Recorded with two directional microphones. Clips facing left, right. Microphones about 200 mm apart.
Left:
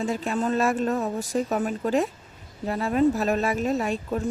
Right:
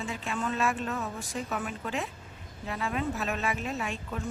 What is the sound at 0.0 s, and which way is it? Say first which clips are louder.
A woman's voice: left 8 dB; 40° left (ahead or behind).